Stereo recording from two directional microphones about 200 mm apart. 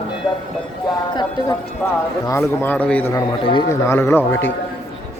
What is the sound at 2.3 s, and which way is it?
Speech, 10° left (ahead or behind).